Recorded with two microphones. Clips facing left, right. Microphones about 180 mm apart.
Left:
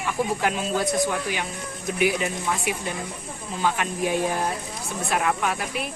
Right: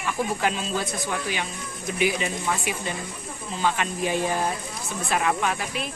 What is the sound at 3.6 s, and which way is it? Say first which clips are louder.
Speech: left 1 dB; 10° left (ahead or behind).